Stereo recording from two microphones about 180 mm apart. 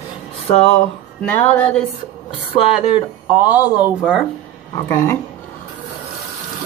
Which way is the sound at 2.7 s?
5° right (ahead or behind).